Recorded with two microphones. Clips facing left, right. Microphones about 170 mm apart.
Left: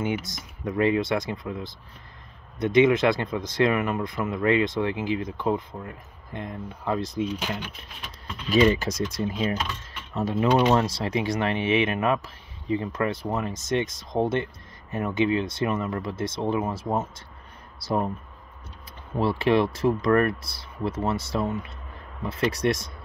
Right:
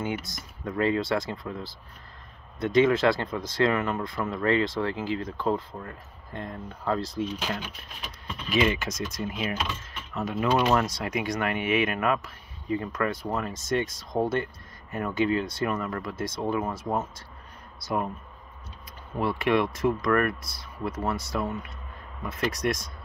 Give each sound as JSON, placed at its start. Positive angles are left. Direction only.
{"t": 0.0, "sound": "speech", "side_deg": 20}
{"t": 8.5, "sound": "speech", "side_deg": 35}
{"t": 19.1, "sound": "speech", "side_deg": 30}